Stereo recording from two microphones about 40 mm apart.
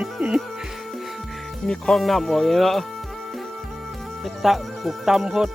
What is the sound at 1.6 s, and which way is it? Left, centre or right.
Speech, centre.